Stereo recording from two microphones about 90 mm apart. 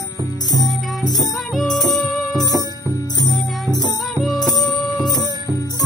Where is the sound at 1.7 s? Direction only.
50° left (ahead or behind).